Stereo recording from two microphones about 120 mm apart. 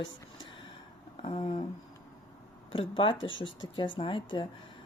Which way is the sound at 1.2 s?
50° left (ahead or behind).